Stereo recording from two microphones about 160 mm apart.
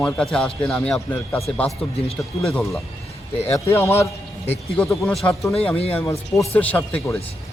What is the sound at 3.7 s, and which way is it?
Speech, 15° left (ahead or behind).